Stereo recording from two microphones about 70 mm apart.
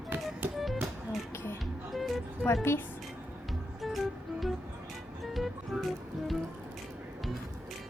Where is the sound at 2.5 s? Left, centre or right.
Left.